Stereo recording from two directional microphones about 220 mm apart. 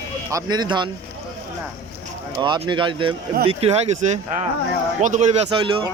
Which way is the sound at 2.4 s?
20° right (ahead or behind).